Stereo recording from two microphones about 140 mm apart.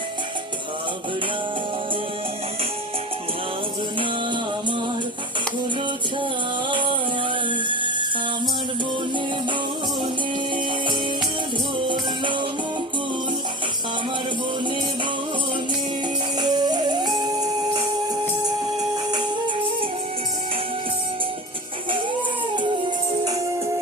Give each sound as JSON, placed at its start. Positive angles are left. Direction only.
{"t": 6.7, "sound": "a sound", "side_deg": -35}
{"t": 11.9, "sound": "music", "side_deg": -35}
{"t": 16.4, "sound": "music", "side_deg": -30}